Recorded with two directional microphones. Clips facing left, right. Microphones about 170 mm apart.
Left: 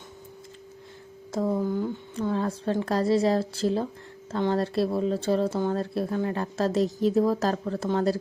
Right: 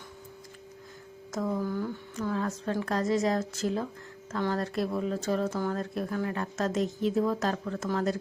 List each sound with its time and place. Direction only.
1.3 s speech: 30° left (ahead or behind)
2.1 s speech: 30° left (ahead or behind)